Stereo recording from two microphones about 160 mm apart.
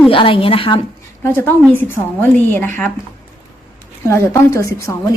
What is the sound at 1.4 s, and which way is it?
A woman's voice, 10° left (ahead or behind).